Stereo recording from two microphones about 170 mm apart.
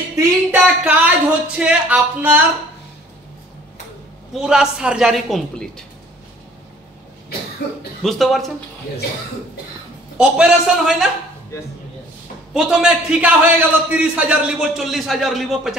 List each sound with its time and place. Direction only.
0.1 s speech: 10° right (ahead or behind)
4.3 s a man's voice: 5° right (ahead or behind)
8.0 s a man's voice: centre (ahead or behind)
10.1 s a man's voice: 5° right (ahead or behind)
11.5 s a man's voice: 15° left (ahead or behind)
12.5 s a man's voice: 5° right (ahead or behind)